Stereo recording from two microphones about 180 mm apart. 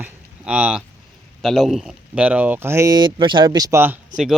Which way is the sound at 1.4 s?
Centre (ahead or behind).